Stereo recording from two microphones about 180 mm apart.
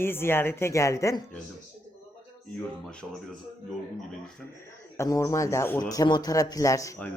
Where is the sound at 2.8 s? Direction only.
5° left (ahead or behind).